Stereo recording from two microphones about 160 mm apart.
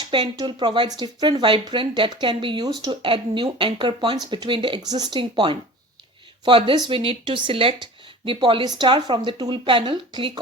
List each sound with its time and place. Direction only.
0.0 s speech: 25° right (ahead or behind)